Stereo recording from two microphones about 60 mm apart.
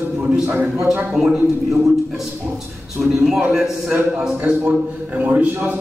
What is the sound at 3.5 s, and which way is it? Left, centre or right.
Speech, centre.